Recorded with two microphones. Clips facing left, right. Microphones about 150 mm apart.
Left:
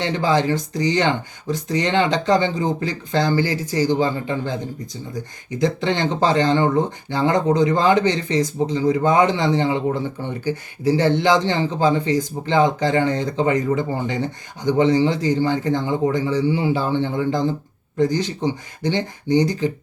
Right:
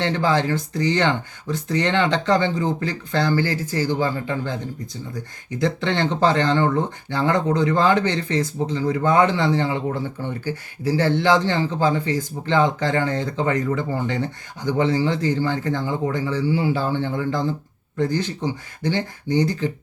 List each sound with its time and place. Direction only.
0.0 s speech: 15° left (ahead or behind)